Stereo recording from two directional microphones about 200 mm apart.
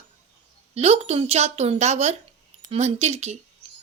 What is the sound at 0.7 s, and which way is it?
Speech, 30° right (ahead or behind).